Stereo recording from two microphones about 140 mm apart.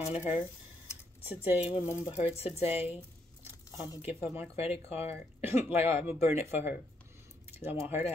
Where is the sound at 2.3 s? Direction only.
45° left (ahead or behind).